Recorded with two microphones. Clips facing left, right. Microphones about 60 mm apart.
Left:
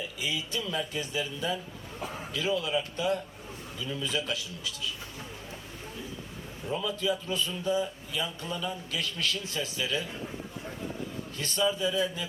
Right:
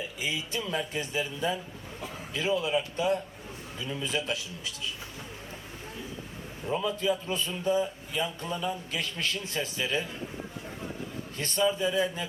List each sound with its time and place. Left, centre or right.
0.2 s speech: right
6.7 s speech: right
11.3 s speech: right